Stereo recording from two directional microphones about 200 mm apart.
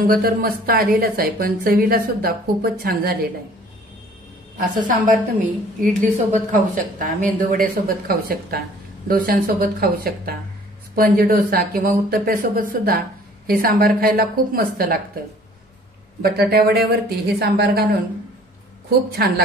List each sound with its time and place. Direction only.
0.0 s a woman's voice: 45° right (ahead or behind)
4.6 s a woman's voice: 40° right (ahead or behind)
16.2 s a woman's voice: 50° right (ahead or behind)
18.9 s a woman's voice: 50° right (ahead or behind)